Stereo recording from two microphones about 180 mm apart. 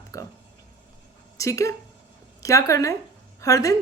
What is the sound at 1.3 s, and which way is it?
A woman's voice, 15° left (ahead or behind).